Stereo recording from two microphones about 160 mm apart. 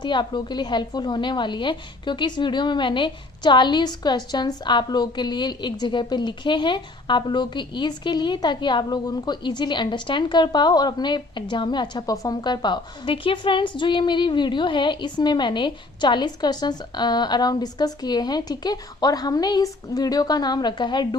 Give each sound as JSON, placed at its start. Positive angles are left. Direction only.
{"t": 0.0, "sound": "a woman's voice", "side_deg": 30}